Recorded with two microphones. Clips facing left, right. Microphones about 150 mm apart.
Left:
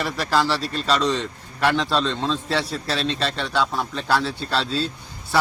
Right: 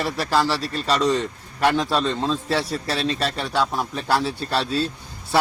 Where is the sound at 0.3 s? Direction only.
Centre (ahead or behind).